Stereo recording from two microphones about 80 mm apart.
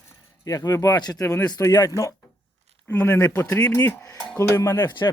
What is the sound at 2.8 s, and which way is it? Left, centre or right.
Speech, left.